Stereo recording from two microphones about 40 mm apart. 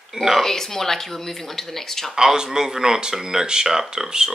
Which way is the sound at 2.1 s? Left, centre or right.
Centre.